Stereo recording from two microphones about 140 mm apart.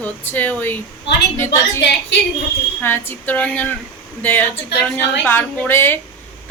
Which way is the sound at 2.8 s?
15° left (ahead or behind).